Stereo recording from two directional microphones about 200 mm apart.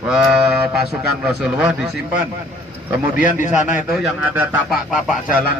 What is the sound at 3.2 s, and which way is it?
A man's voice, 5° right (ahead or behind).